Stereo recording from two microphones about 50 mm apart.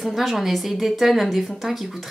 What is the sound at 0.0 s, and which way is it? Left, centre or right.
Speech, centre.